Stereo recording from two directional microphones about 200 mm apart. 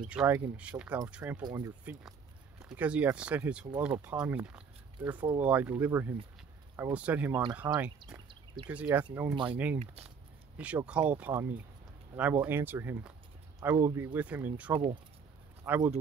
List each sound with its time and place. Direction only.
0.1 s speech: 5° right (ahead or behind)
1.4 s speech: 20° right (ahead or behind)
2.6 s speech: 5° right (ahead or behind)
9.3 s speech: 25° right (ahead or behind)
10.6 s speech: 5° right (ahead or behind)